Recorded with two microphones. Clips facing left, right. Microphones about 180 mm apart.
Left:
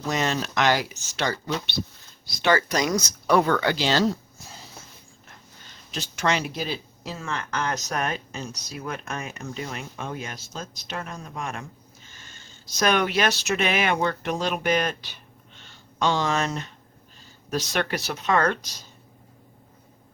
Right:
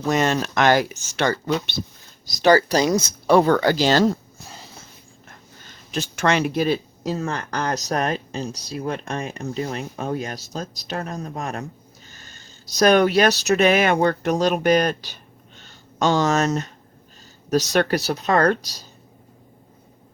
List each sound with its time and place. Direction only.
0.1 s speech: 50° right (ahead or behind)
2.2 s speech: 40° right (ahead or behind)
5.9 s speech: 50° right (ahead or behind)